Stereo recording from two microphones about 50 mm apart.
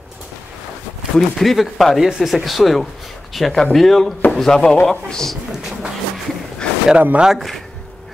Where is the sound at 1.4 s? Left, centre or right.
Centre.